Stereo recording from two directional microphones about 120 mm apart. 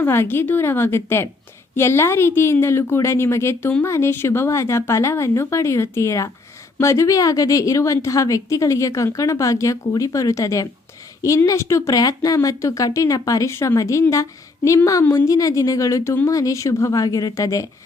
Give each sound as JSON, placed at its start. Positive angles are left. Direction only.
{"t": 0.0, "sound": "a woman's voice", "side_deg": 20}